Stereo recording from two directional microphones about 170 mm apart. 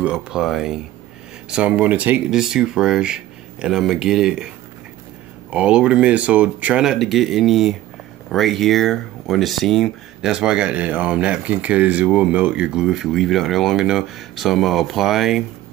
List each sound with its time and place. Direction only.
0.0 s speech: 5° right (ahead or behind)
5.5 s speech: 5° right (ahead or behind)